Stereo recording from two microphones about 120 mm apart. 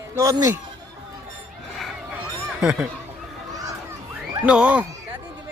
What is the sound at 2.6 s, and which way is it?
Speech, 10° right (ahead or behind).